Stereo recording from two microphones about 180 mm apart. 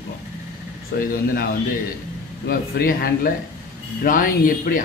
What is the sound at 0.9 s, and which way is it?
Speech, 60° left (ahead or behind).